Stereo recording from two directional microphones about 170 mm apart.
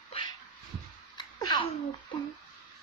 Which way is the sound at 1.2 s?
25° left (ahead or behind).